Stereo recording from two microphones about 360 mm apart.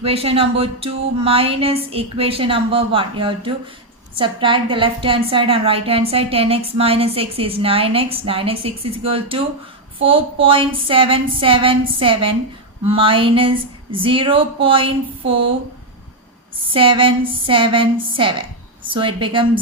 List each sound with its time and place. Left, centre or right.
0.0 s a woman's voice: centre
16.6 s a woman's voice: centre